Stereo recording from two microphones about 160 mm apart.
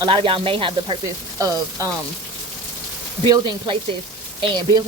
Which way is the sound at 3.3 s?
30° right (ahead or behind).